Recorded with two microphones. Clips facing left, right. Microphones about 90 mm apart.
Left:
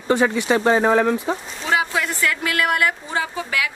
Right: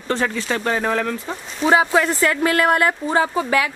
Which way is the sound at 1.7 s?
35° right (ahead or behind).